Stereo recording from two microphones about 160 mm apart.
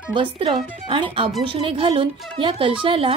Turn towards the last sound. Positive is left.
turn(degrees=-35)  # may be behind; listen again after turning